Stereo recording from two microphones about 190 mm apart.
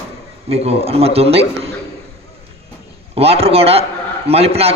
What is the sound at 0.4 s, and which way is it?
A man's voice, 30° right (ahead or behind).